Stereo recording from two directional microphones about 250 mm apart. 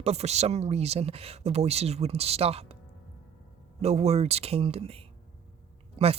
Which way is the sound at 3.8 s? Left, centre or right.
Right.